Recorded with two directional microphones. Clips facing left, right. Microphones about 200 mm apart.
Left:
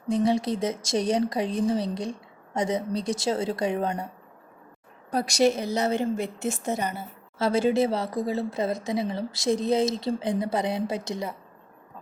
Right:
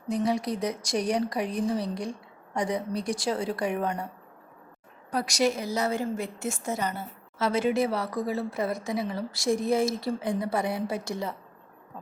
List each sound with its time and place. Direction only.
0.1 s speech: 25° left (ahead or behind)
5.1 s speech: 25° left (ahead or behind)
7.3 s speech: 30° left (ahead or behind)